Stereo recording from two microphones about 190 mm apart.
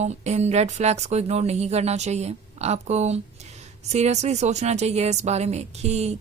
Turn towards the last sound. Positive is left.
turn(degrees=-35)  # may be behind; listen again after turning